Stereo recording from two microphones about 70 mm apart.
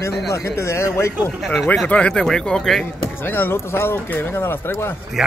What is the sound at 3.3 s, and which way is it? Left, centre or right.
Speech, left.